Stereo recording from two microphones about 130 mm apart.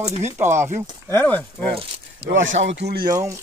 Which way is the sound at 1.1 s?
15° left (ahead or behind).